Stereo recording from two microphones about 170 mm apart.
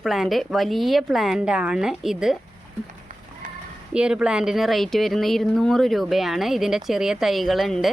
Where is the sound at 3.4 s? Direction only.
50° right (ahead or behind).